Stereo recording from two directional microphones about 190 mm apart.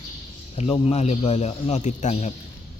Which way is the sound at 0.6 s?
35° left (ahead or behind).